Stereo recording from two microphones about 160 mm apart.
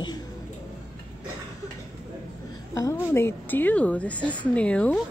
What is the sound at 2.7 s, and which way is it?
A woman's voice, 20° left (ahead or behind).